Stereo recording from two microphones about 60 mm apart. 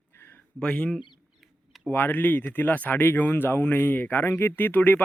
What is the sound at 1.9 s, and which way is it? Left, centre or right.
Speech, left.